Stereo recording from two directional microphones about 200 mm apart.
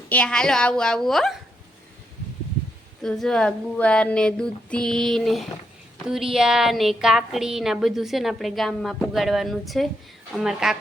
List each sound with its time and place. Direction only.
0.1 s a woman's voice: 5° left (ahead or behind)
3.0 s a woman's voice: centre (ahead or behind)